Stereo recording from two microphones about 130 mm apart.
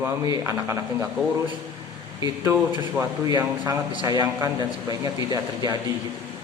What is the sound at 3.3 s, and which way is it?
A man's voice, 30° right (ahead or behind).